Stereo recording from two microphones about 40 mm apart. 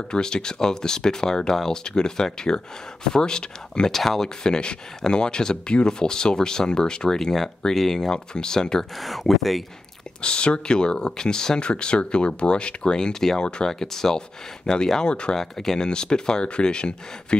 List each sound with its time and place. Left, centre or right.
0.1 s speech: centre
3.9 s speech: centre
4.4 s speech: left
9.0 s speech: centre
10.2 s speech: left
13.4 s speech: left
13.7 s speech: centre